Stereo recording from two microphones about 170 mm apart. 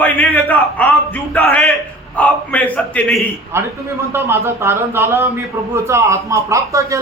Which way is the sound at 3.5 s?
15° right (ahead or behind).